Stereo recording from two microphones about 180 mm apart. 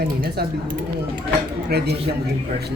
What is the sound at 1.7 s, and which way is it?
Speech, 60° right (ahead or behind).